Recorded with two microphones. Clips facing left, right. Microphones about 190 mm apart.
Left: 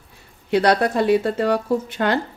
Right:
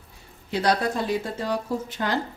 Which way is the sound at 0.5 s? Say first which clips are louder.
Left 6 dB; 65° left (ahead or behind).